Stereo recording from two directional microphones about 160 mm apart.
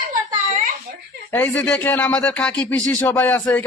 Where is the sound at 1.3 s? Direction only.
10° left (ahead or behind).